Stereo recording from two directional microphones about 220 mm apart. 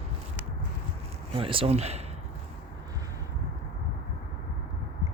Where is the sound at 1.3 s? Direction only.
25° right (ahead or behind).